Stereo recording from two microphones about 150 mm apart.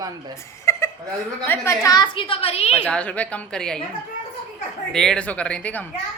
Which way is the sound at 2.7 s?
10° left (ahead or behind).